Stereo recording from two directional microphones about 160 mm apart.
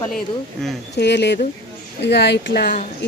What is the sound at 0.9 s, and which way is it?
Speech, 90° left.